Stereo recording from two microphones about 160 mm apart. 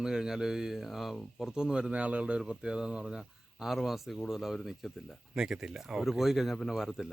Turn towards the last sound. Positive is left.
turn(degrees=0)  # may be behind; listen again after turning